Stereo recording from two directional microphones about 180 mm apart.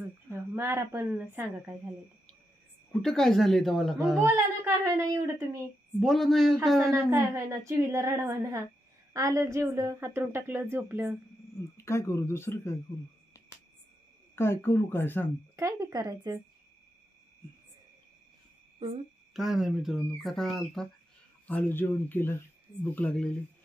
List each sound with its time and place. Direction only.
0.3 s a woman's voice: 15° right (ahead or behind)
3.0 s a woman's voice: centre (ahead or behind)
4.3 s a woman's voice: 15° right (ahead or behind)
5.9 s a woman's voice: centre (ahead or behind)
6.9 s a woman's voice: 15° right (ahead or behind)
11.7 s speech: 15° left (ahead or behind)
14.3 s speech: 15° left (ahead or behind)
15.5 s speech: 20° right (ahead or behind)
19.3 s a woman's voice: centre (ahead or behind)